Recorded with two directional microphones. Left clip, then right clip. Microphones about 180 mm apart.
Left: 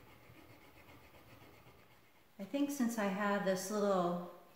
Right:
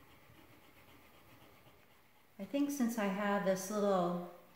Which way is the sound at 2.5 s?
20° right (ahead or behind).